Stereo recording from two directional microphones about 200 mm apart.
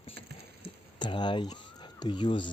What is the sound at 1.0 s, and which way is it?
Speech, 20° left (ahead or behind).